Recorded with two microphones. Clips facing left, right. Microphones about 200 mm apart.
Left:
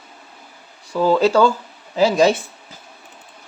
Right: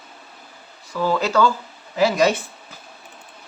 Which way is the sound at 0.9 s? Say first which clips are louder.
Left 6 dB; 30° left (ahead or behind).